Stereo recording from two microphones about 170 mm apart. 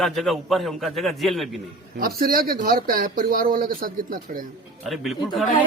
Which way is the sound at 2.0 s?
60° right (ahead or behind).